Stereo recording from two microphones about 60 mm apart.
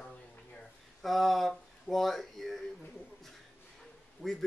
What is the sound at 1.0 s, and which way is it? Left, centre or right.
Speech, centre.